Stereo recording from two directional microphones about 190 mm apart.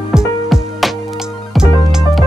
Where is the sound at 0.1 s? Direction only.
Centre (ahead or behind).